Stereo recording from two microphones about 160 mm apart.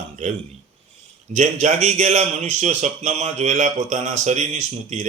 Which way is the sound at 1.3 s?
50° right (ahead or behind).